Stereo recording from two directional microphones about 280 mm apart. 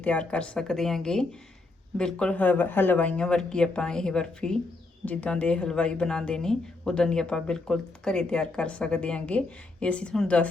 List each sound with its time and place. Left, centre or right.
0.0 s speech: centre